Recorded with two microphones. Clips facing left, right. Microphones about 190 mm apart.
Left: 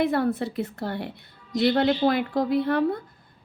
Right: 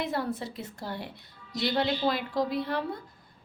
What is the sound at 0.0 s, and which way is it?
A woman's voice, 60° left (ahead or behind).